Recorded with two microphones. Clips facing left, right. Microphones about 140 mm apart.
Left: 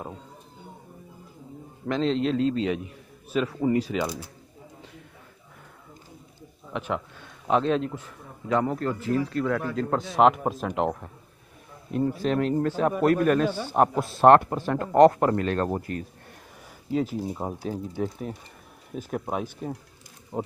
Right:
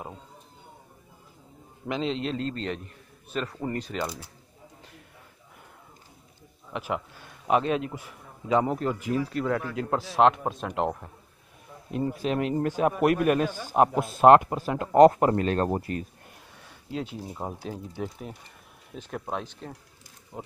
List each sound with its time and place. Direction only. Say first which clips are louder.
1.9 s speech: left 5 dB; 5° right (ahead or behind)
6.7 s speech: left 1 dB; 5° right (ahead or behind)
12.1 s speech: left 2 dB; 10° right (ahead or behind)
16.9 s speech: left 7 dB; 5° left (ahead or behind)
20.3 s speech: left 9 dB; 35° left (ahead or behind)